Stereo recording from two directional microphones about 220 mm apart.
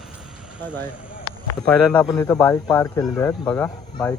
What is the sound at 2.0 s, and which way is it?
Speech, 10° left (ahead or behind).